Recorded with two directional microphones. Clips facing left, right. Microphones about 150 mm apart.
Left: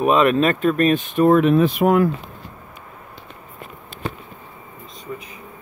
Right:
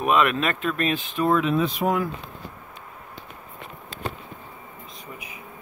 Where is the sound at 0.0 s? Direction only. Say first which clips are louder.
Left 6 dB; 35° left (ahead or behind); by 2.0 s 60° left (ahead or behind).